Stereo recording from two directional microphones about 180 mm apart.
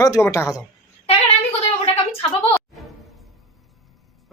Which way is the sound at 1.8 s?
30° left (ahead or behind).